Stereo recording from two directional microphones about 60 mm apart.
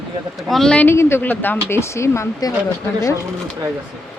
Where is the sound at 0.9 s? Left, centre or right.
Left.